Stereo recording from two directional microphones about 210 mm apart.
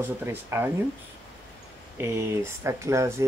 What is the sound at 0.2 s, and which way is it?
Speech, 10° right (ahead or behind).